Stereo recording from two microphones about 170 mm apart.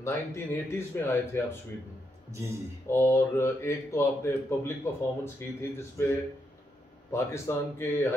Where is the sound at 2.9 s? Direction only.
15° left (ahead or behind).